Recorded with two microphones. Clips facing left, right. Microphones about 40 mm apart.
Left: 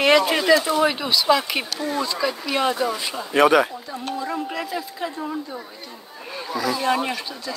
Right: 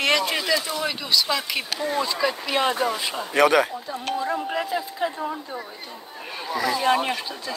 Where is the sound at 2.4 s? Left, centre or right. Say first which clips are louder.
Left 2 dB; right.